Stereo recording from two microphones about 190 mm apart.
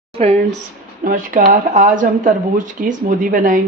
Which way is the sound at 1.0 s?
45° right (ahead or behind).